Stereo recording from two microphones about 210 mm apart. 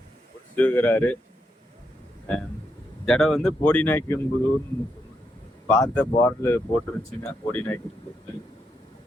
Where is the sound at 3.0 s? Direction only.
Centre (ahead or behind).